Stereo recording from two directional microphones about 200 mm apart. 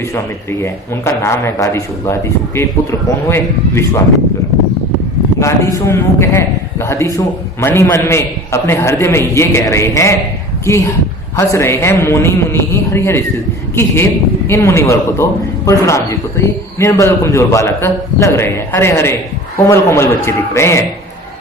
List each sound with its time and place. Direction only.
0.6 s a man's voice: 15° left (ahead or behind)
3.2 s a man's voice: 15° left (ahead or behind)
5.4 s a man's voice: 15° left (ahead or behind)